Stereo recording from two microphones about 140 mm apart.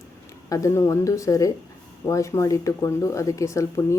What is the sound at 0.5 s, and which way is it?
Speech, 20° left (ahead or behind).